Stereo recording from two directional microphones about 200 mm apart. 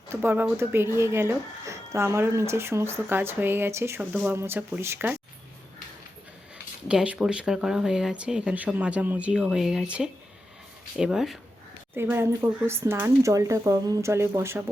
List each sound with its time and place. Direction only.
0.1 s speech: 10° right (ahead or behind)
6.8 s speech: 5° right (ahead or behind)